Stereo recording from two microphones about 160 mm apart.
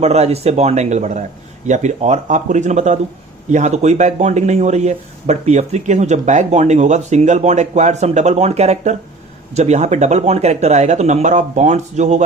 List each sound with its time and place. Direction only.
0.0 s speech: 40° right (ahead or behind)